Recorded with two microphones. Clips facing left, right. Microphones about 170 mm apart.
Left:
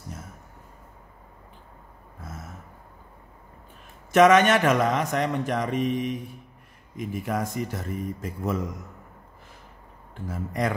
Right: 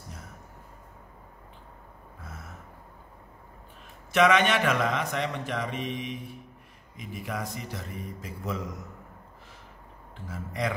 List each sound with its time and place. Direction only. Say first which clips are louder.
4.1 s a man's voice: left 5 dB; 45° left (ahead or behind)
10.2 s a man's voice: left 4 dB; 45° left (ahead or behind)